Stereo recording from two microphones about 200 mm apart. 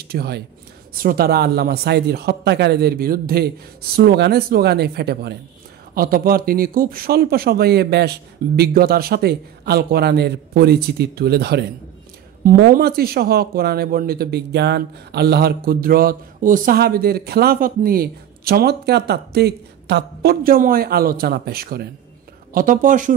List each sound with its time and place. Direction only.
0.1 s speech: 50° right (ahead or behind)